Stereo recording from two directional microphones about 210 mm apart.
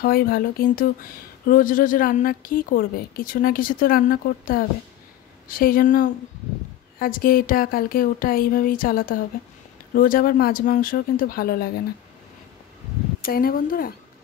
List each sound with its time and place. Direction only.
0.0 s a woman's voice: 45° left (ahead or behind)
13.2 s a woman's voice: 45° left (ahead or behind)